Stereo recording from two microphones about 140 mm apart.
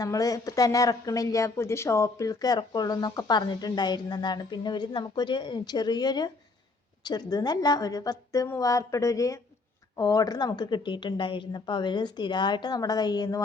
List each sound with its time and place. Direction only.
0.0 s a woman's voice: 25° left (ahead or behind)